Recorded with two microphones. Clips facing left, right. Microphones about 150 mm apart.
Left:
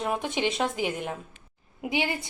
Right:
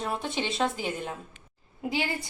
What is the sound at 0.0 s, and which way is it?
A woman's voice, 15° left (ahead or behind).